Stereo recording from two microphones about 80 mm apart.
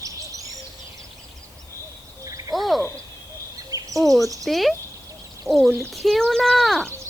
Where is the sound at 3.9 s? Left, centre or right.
Centre.